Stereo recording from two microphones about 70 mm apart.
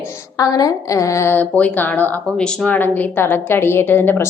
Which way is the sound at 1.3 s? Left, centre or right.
Left.